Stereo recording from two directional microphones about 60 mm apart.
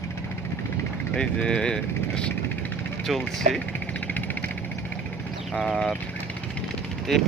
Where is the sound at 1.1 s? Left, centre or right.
Centre.